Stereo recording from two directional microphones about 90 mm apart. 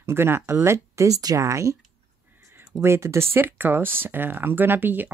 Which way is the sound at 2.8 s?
30° right (ahead or behind).